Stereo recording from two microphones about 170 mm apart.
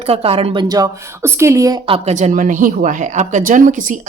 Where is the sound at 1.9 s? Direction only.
40° right (ahead or behind).